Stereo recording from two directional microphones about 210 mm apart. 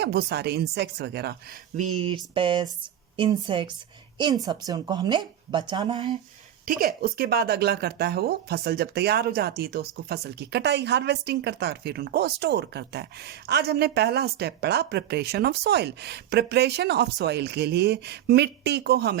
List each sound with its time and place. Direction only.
0.0 s speech: 50° right (ahead or behind)
1.7 s a woman's voice: 35° right (ahead or behind)
6.7 s speech: 45° right (ahead or behind)